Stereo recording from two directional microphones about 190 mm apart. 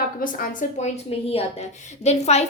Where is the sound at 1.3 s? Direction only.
35° left (ahead or behind).